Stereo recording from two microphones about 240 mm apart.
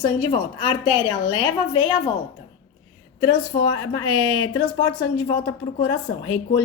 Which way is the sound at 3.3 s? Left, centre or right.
Centre.